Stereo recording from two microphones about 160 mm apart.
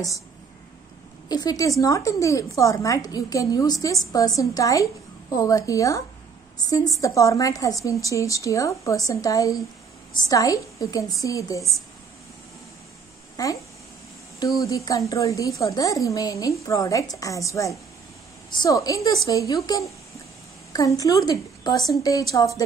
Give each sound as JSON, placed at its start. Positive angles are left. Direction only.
{"t": 1.3, "sound": "a woman's voice", "side_deg": 25}
{"t": 13.4, "sound": "a woman's voice", "side_deg": 25}
{"t": 14.6, "sound": "a woman's voice", "side_deg": 20}